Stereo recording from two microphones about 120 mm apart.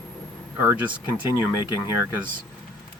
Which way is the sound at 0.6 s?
15° right (ahead or behind).